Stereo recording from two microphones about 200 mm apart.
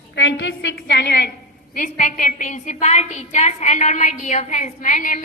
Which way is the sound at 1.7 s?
40° left (ahead or behind).